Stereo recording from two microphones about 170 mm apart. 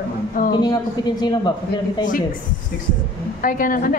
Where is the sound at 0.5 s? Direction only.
25° left (ahead or behind).